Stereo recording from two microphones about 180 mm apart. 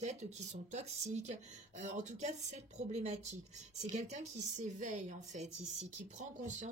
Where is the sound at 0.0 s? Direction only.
40° right (ahead or behind).